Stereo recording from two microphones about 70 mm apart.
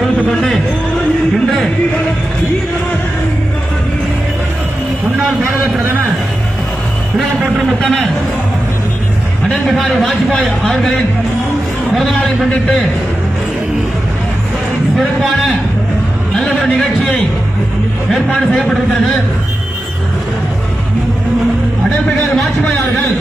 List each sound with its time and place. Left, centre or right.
5.8 s a man's voice: right
7.8 s a man's voice: centre
9.5 s a man's voice: centre
18.1 s a man's voice: centre
22.1 s a sound: centre